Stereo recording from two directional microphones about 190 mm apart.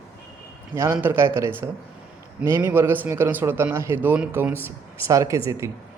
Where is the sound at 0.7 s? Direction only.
15° right (ahead or behind).